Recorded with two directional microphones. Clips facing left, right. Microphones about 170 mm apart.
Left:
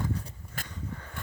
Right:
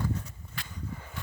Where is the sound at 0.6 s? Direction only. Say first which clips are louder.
Left 2 dB; 45° left (ahead or behind).